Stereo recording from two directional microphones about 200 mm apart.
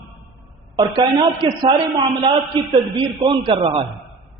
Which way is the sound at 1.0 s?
25° right (ahead or behind).